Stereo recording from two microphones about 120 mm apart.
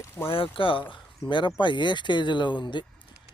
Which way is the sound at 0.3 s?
50° left (ahead or behind).